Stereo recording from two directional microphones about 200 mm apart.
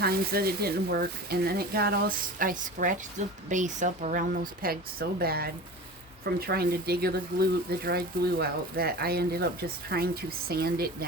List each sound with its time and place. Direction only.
0.0 s speech: 50° right (ahead or behind)